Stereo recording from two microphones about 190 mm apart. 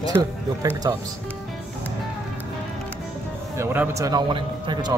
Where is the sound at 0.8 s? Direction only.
20° right (ahead or behind).